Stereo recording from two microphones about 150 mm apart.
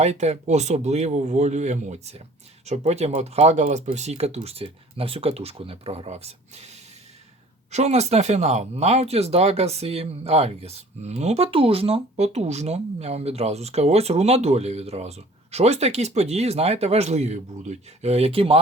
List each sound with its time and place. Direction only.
0.0 s speech: 45° right (ahead or behind)